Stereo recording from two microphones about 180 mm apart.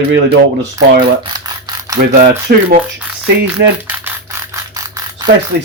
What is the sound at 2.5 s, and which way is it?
Speech, 55° right (ahead or behind).